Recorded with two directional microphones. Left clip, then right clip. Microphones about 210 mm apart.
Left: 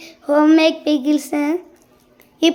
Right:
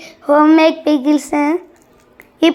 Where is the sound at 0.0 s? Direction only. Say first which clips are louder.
Right 4 dB; 5° right (ahead or behind).